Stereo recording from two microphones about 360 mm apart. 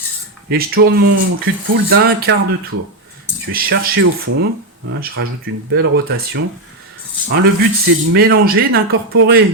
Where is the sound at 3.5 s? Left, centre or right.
Right.